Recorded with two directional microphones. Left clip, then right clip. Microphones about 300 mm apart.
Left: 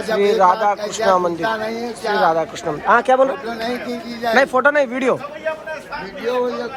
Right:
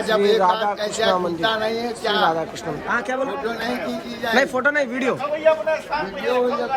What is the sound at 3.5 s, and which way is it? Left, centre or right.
Speech, centre.